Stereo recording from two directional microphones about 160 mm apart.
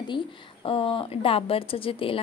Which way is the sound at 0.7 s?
35° left (ahead or behind).